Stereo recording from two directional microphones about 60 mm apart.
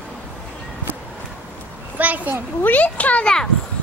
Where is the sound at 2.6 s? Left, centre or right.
Left.